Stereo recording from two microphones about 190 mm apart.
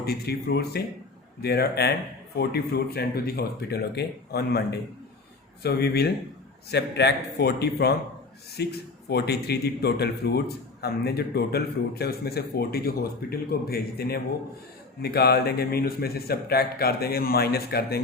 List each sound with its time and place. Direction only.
0.0 s a man's voice: 55° left (ahead or behind)
5.6 s a man's voice: 55° left (ahead or behind)